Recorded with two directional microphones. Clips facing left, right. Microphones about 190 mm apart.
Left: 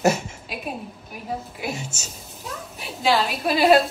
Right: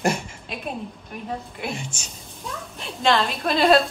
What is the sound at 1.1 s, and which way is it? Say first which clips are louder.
A woman's voice: left 2 dB; 5° left (ahead or behind).